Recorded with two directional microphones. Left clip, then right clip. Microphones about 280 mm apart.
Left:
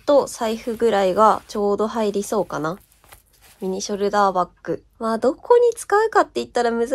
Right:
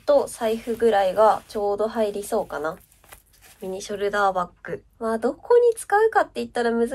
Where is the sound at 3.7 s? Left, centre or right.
Centre.